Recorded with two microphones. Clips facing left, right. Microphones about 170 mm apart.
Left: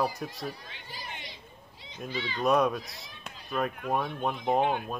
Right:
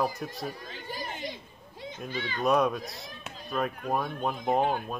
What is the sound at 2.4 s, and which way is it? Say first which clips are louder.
Speech: even; centre (ahead or behind).